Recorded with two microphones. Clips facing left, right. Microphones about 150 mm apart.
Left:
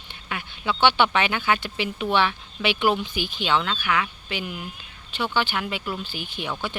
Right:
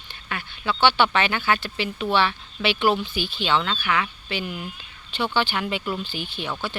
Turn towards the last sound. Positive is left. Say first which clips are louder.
# right 1 dB
turn(degrees=10)  # may be behind; listen again after turning